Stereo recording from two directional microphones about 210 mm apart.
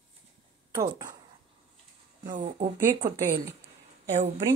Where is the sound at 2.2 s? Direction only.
35° right (ahead or behind).